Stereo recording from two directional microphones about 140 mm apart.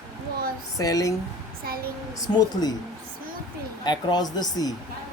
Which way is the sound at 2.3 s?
30° left (ahead or behind).